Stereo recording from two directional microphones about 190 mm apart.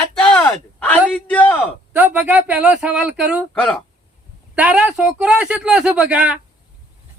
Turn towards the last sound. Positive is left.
turn(degrees=-5)  # may be behind; listen again after turning